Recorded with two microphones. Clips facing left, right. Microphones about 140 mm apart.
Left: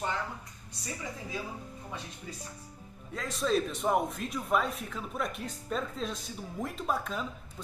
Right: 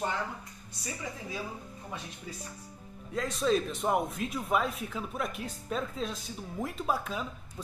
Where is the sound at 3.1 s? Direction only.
Centre (ahead or behind).